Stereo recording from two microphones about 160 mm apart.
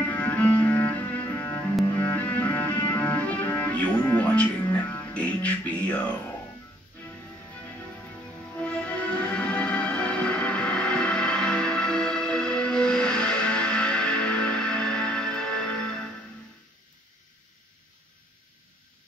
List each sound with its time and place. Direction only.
0.0 s cello: 10° left (ahead or behind)
1.9 s music: 15° left (ahead or behind)
8.5 s music: 10° left (ahead or behind)